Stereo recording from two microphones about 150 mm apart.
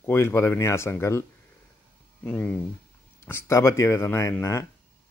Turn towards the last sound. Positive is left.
turn(degrees=20)  # may be behind; listen again after turning